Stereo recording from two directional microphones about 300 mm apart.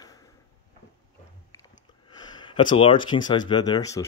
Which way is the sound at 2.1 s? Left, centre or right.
Centre.